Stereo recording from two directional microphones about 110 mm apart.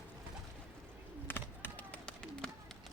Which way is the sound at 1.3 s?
15° left (ahead or behind).